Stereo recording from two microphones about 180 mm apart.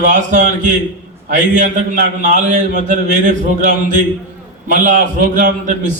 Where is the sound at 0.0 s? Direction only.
45° right (ahead or behind).